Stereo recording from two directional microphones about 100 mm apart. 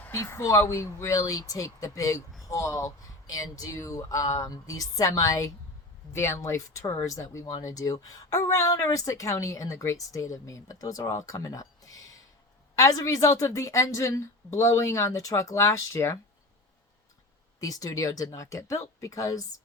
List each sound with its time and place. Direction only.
0.1 s speech: 30° left (ahead or behind)
17.6 s speech: 35° left (ahead or behind)